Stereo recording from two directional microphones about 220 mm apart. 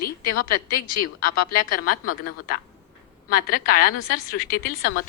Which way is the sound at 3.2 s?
40° left (ahead or behind).